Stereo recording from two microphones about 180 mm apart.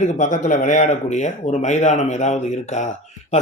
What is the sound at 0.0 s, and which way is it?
A man's voice, 40° left (ahead or behind).